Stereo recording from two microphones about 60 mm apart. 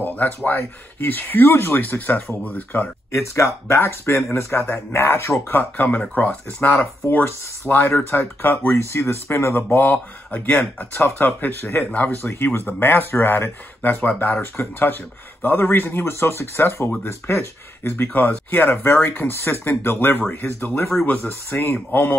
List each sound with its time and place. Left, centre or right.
0.0 s speech: left
3.2 s speech: left
5.5 s speech: left
10.3 s speech: left
21.7 s speech: left